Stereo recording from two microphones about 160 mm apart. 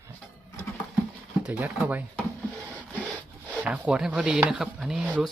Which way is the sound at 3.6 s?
5° right (ahead or behind).